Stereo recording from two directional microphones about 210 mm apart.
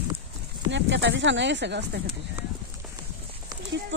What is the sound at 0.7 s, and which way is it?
Speech, 60° right (ahead or behind).